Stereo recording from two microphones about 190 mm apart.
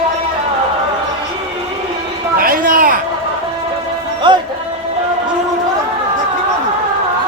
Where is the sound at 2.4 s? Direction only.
50° right (ahead or behind).